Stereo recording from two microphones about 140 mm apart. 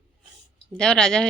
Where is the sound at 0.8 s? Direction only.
5° left (ahead or behind).